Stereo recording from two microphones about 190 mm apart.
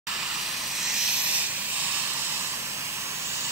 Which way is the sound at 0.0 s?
Centre (ahead or behind).